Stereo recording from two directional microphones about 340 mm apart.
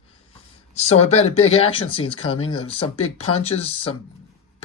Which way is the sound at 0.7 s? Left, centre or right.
Centre.